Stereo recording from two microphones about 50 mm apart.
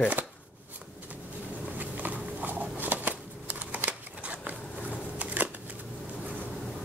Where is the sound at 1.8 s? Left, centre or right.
Right.